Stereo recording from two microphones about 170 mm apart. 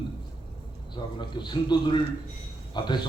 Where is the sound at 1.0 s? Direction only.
25° left (ahead or behind).